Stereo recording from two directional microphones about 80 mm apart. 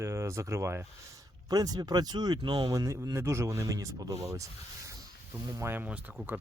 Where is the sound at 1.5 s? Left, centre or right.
Right.